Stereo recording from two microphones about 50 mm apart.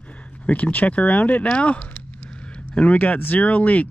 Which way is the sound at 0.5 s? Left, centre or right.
Left.